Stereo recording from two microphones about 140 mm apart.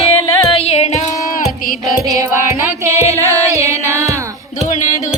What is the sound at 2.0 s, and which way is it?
Music, 25° right (ahead or behind).